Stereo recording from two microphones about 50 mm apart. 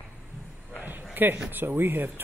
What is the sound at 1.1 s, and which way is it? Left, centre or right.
Speech, right.